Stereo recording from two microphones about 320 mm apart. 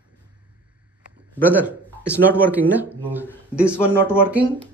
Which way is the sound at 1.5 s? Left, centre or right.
Centre.